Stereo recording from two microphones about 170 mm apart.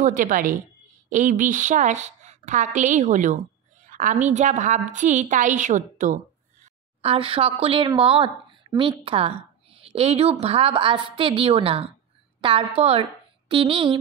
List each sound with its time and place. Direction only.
0.0 s a woman's voice: 50° right (ahead or behind)
7.0 s a woman's voice: 35° right (ahead or behind)